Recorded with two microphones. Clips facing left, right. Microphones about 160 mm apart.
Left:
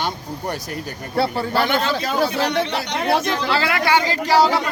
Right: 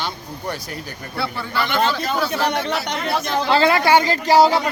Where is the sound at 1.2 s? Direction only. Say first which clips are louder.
Left 5 dB; 40° left (ahead or behind).